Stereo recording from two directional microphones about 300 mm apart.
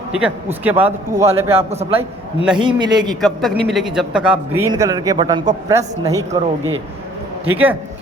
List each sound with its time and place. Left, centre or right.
0.1 s a man's voice: centre
0.9 s a man's voice: centre
2.0 s a man's voice: centre
2.6 s a man's voice: centre
3.2 s a man's voice: centre
7.4 s a man's voice: centre